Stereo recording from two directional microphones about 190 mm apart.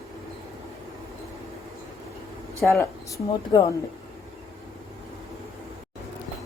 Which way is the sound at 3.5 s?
20° left (ahead or behind).